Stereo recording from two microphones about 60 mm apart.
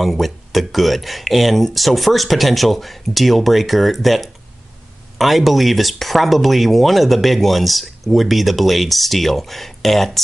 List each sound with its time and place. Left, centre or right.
0.0 s speech: centre